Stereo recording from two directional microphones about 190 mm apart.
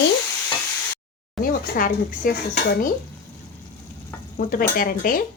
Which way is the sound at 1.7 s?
50° left (ahead or behind).